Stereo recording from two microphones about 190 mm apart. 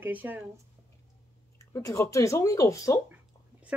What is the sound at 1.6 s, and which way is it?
Speech, 15° left (ahead or behind).